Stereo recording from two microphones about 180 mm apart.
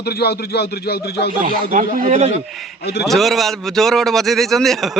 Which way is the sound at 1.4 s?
45° right (ahead or behind).